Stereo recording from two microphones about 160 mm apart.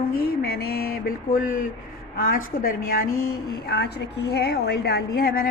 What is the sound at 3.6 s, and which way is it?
A woman's voice, 90° left.